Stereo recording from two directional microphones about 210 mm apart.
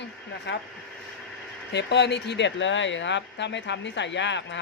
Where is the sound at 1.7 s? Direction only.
55° left (ahead or behind).